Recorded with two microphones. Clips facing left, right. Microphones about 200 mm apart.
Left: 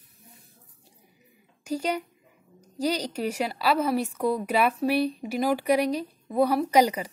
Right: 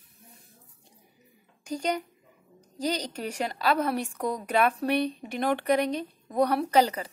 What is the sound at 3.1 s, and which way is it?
A woman's voice, 10° left (ahead or behind).